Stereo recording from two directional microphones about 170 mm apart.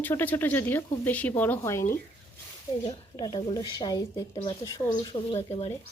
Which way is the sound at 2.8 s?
30° left (ahead or behind).